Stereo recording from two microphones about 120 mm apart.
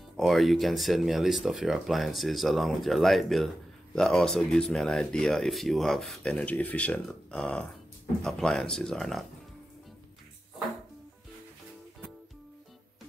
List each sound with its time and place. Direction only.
0.2 s speech: centre (ahead or behind)